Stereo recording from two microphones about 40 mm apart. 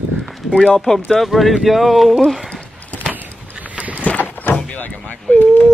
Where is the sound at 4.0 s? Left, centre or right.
Left.